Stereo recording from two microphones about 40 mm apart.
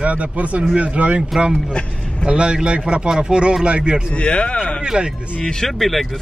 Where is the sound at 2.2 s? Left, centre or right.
Right.